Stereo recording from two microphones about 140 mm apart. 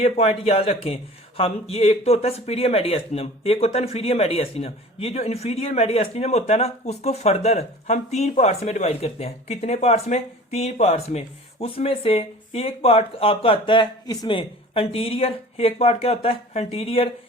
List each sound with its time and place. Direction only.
0.0 s speech: 45° left (ahead or behind)